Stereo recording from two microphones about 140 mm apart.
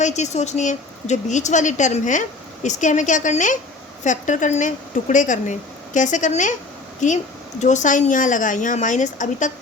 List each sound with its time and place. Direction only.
0.0 s speech: 55° left (ahead or behind)